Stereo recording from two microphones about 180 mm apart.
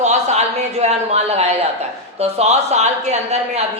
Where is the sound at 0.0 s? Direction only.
40° right (ahead or behind).